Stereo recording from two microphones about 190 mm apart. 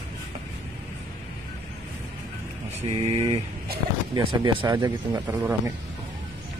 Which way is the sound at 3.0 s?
30° right (ahead or behind).